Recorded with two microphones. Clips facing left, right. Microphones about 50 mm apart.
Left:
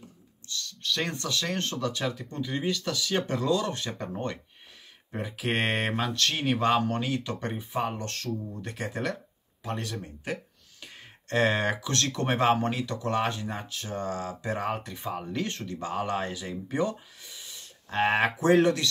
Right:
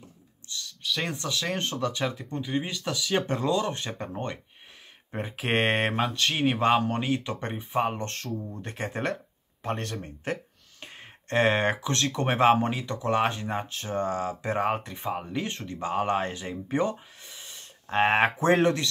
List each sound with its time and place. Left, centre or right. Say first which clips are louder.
0.7 s a sound: even; centre
1.3 s speech: right 2 dB; centre
1.6 s speech: right 2 dB; right
3.3 s speech: right 1 dB; right
5.1 s speech: right 2 dB; right
9.6 s speech: right 3 dB; right
10.8 s speech: right 2 dB; right
16.9 s speech: right 2 dB; centre
17.4 s a sound: right 1 dB; right
18.0 s speech: right 1 dB; right